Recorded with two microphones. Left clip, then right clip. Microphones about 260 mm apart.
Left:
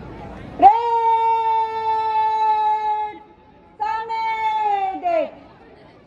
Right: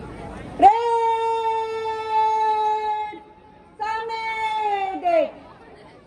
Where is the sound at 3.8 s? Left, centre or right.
Left.